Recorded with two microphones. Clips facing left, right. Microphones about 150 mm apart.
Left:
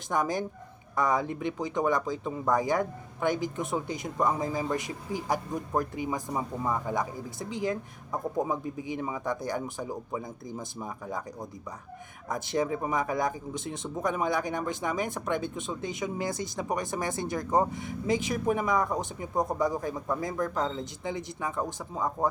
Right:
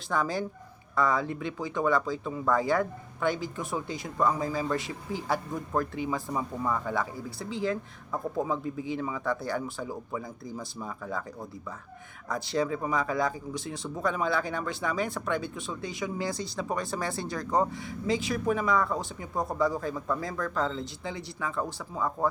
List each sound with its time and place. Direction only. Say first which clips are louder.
0.1 s speech: left 1 dB; 20° left (ahead or behind)